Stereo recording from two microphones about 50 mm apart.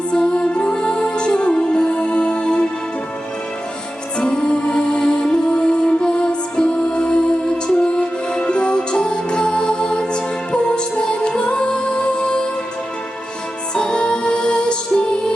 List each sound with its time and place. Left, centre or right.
0.1 s music: centre
4.2 s music: left
13.7 s music: centre